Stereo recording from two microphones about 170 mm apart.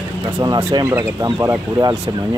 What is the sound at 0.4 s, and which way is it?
Speech, 25° right (ahead or behind).